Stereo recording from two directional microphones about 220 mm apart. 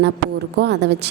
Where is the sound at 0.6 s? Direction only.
50° right (ahead or behind).